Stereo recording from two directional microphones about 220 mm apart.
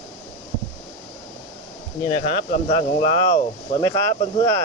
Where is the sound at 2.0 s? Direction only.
30° left (ahead or behind).